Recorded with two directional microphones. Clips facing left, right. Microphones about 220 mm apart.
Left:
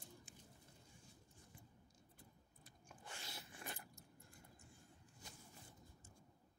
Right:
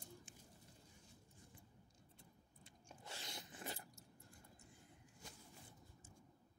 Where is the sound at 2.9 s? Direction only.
25° right (ahead or behind).